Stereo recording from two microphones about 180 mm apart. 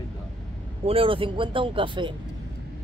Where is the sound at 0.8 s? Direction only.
30° right (ahead or behind).